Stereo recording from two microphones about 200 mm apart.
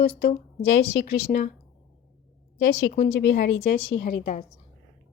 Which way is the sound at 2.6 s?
70° left (ahead or behind).